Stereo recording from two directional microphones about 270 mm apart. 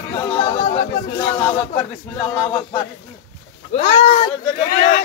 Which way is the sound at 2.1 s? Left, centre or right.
Centre.